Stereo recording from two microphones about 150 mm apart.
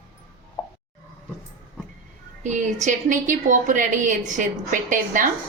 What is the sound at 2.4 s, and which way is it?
A woman's voice, 55° right (ahead or behind).